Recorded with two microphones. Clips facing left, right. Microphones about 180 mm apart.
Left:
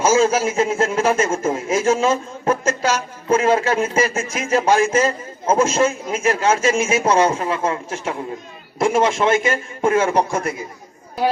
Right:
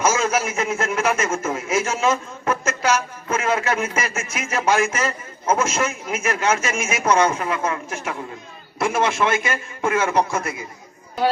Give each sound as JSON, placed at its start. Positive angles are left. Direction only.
{"t": 0.0, "sound": "a man's voice", "side_deg": 30}